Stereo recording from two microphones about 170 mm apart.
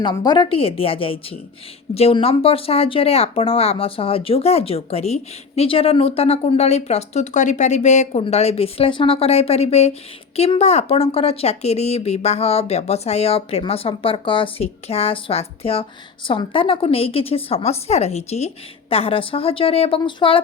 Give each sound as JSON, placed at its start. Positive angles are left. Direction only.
{"t": 0.0, "sound": "a woman's voice", "side_deg": 25}